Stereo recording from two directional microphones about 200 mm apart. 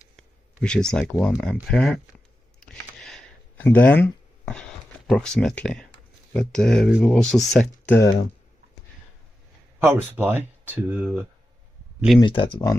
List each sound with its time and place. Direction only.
0.1 s speech: 5° left (ahead or behind)
2.6 s a sound: 5° left (ahead or behind)
6.3 s speech: 5° left (ahead or behind)
9.8 s speech: 10° right (ahead or behind)
12.2 s speech: 25° left (ahead or behind)